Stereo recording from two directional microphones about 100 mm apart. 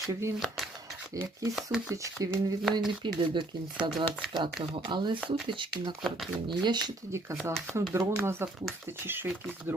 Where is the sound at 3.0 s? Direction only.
50° right (ahead or behind).